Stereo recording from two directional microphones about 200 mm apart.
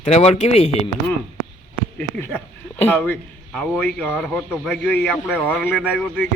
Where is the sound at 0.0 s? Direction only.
35° left (ahead or behind).